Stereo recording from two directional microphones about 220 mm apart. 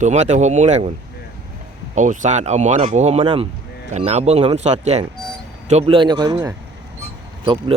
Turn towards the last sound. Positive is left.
turn(degrees=-20)  # may be behind; listen again after turning